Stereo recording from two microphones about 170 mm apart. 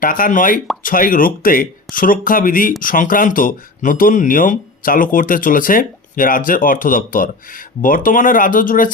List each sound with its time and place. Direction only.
0.0 s speech: 55° left (ahead or behind)